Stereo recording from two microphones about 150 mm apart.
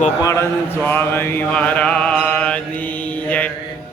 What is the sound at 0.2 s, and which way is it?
Mantra, 20° left (ahead or behind).